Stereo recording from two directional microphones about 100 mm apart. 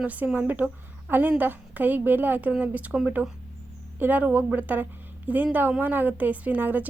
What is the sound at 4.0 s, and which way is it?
A woman's voice, 15° right (ahead or behind).